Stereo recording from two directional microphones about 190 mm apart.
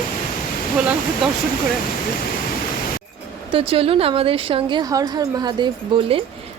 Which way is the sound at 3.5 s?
30° right (ahead or behind).